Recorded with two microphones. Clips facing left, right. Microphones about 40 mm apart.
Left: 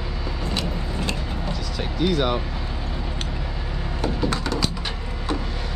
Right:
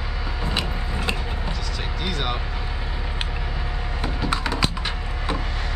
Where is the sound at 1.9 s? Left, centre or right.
Centre.